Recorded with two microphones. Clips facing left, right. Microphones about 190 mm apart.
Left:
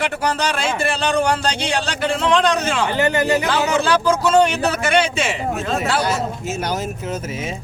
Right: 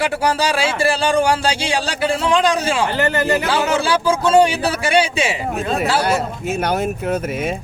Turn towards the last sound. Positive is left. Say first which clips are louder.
# right 5 dB
turn(degrees=-60)  # may be behind; listen again after turning